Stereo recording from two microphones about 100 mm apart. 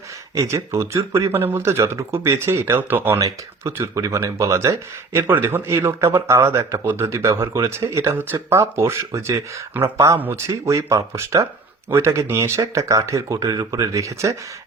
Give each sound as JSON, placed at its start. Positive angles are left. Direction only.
{"t": 0.3, "sound": "speech", "side_deg": -30}
{"t": 3.2, "sound": "speech", "side_deg": -30}